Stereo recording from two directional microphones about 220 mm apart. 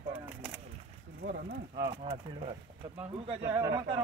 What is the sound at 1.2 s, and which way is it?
Speech, 45° right (ahead or behind).